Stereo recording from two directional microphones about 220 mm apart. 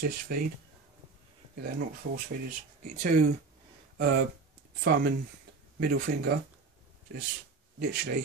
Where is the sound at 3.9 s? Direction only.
50° right (ahead or behind).